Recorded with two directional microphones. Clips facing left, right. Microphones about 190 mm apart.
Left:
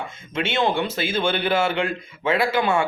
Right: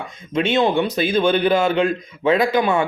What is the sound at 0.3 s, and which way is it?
A man's voice, 15° right (ahead or behind).